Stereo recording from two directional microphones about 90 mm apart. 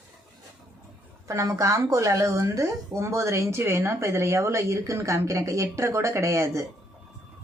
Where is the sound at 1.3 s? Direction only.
35° right (ahead or behind).